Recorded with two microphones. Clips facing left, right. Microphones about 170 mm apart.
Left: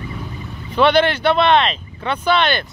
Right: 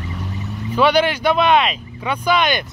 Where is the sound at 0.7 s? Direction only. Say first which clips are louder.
Left 1 dB; 10° right (ahead or behind).